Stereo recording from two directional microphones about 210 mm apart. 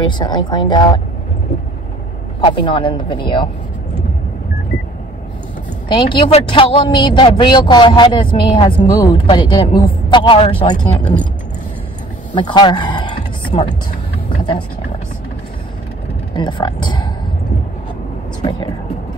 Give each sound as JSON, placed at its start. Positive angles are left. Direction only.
{"t": 0.0, "sound": "a woman's voice", "side_deg": 20}
{"t": 2.4, "sound": "a woman's voice", "side_deg": 25}
{"t": 5.9, "sound": "a woman's voice", "side_deg": 25}
{"t": 12.4, "sound": "a sound", "side_deg": 20}
{"t": 16.3, "sound": "a woman's voice", "side_deg": 20}